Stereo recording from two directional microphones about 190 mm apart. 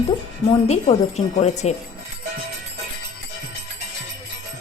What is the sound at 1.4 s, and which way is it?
Speech, 35° left (ahead or behind).